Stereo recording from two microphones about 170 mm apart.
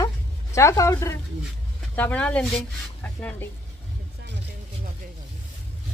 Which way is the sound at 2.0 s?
10° left (ahead or behind).